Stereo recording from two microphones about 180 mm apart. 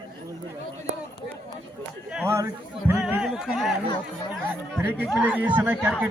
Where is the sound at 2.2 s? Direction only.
15° right (ahead or behind).